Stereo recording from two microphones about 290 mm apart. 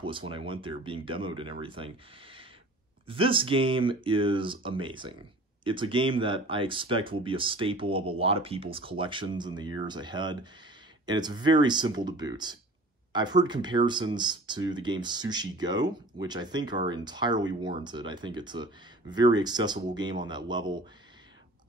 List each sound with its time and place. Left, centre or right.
0.0 s speech: centre